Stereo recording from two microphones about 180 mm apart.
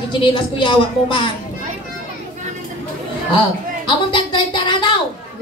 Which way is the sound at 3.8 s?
30° left (ahead or behind).